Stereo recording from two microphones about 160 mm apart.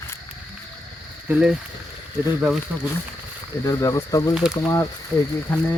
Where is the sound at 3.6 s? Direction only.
20° left (ahead or behind).